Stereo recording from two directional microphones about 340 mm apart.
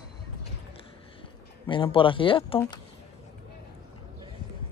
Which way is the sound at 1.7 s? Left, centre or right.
Centre.